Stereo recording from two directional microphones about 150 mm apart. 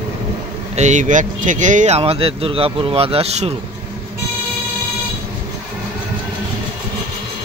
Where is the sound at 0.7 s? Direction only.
50° right (ahead or behind).